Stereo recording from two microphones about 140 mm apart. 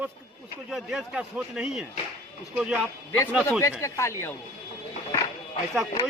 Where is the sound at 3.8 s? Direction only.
20° left (ahead or behind).